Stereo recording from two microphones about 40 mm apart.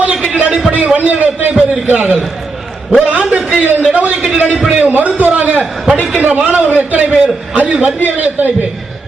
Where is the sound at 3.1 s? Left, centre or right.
Right.